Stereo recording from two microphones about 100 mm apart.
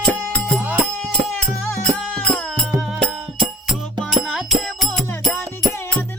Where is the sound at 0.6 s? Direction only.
15° right (ahead or behind).